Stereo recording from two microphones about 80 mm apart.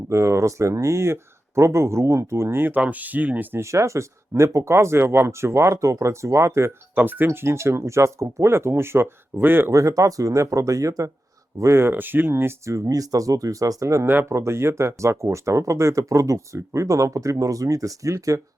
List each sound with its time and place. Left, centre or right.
0.1 s speech: right; by 3.6 s centre
3.6 s speech: right
6.9 s speech: right
7.3 s speech: right
9.7 s speech: right
11.6 s speech: right